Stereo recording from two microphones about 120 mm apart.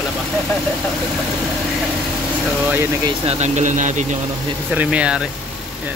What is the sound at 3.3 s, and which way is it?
Speech, 70° right (ahead or behind).